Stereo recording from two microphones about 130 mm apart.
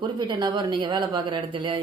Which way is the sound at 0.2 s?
35° right (ahead or behind).